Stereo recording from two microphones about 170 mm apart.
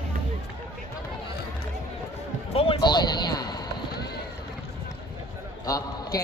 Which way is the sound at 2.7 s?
25° left (ahead or behind).